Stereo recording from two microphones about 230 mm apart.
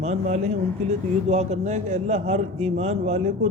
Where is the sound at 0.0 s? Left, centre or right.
Right.